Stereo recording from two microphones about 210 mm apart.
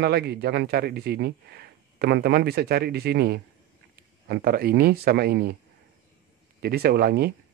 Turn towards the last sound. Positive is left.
turn(degrees=-50)  # may be behind; listen again after turning